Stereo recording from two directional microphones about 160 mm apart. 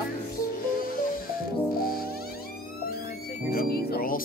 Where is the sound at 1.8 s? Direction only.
70° left (ahead or behind).